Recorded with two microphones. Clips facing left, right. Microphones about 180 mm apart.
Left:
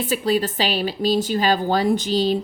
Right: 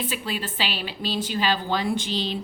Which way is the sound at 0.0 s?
40° left (ahead or behind).